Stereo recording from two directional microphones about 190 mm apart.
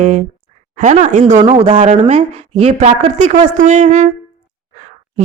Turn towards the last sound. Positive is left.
turn(degrees=-40)  # may be behind; listen again after turning